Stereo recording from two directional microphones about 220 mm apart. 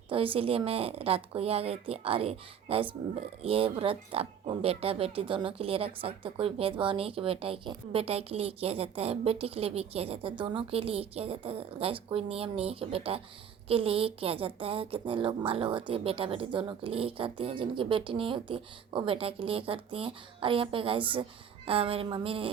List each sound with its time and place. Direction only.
0.1 s speech: 25° right (ahead or behind)